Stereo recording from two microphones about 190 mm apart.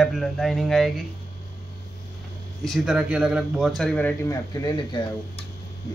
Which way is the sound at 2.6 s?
Centre (ahead or behind).